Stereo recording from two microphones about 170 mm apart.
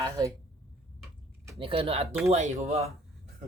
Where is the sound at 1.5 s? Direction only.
30° right (ahead or behind).